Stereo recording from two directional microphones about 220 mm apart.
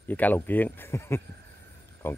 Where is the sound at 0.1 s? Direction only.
10° left (ahead or behind).